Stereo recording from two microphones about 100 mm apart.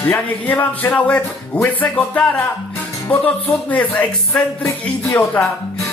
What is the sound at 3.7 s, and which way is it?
Speech, 15° left (ahead or behind).